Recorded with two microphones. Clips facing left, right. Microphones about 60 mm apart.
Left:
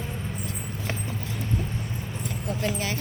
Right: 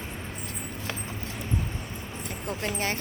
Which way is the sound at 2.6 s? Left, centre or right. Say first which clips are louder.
Left 1 dB; right.